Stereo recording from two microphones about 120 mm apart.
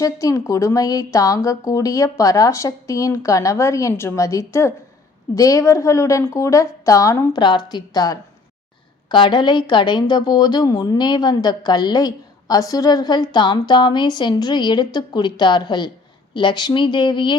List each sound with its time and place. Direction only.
0.0 s speech: 30° left (ahead or behind)
7.4 s a woman's voice: 35° left (ahead or behind)